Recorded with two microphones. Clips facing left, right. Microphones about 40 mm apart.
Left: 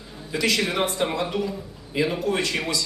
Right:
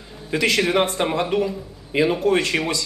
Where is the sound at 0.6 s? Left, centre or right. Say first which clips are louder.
Right 4 dB; right.